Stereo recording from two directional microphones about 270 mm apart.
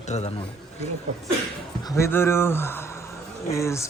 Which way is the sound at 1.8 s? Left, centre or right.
Centre.